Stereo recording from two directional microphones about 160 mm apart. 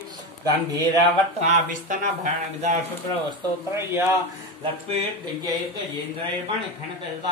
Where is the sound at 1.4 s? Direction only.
55° right (ahead or behind).